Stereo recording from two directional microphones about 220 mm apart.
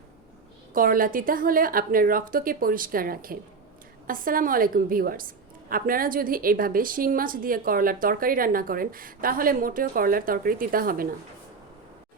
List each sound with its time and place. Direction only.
0.7 s a woman's voice: 40° right (ahead or behind)